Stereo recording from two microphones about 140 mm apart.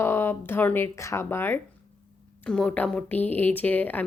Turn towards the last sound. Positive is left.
turn(degrees=10)  # may be behind; listen again after turning